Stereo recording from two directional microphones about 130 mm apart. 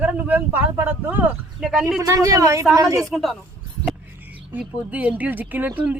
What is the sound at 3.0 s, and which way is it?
Speech, centre (ahead or behind).